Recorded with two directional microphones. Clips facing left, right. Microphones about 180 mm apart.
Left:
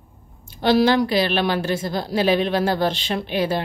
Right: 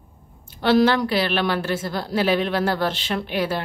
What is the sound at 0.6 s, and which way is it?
Speech, 15° left (ahead or behind).